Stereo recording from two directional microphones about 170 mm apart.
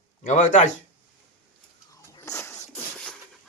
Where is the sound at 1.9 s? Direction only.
20° left (ahead or behind).